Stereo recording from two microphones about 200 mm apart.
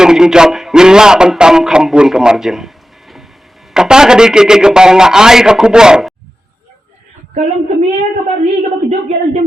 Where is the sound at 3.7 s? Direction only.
5° right (ahead or behind).